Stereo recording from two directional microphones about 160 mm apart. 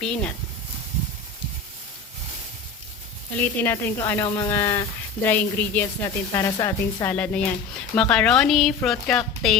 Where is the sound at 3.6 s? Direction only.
15° left (ahead or behind).